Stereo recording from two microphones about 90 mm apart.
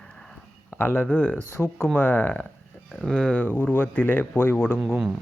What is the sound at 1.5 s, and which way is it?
Speech, 30° left (ahead or behind).